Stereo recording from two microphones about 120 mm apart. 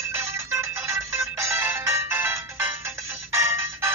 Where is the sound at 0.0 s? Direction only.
20° right (ahead or behind).